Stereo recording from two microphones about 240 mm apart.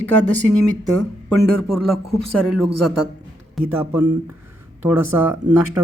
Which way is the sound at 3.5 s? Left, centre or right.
Centre.